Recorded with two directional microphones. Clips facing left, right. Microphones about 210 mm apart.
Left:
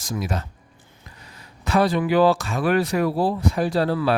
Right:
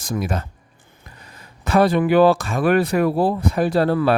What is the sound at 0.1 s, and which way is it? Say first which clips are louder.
Speech: right 3 dB; 55° right (ahead or behind).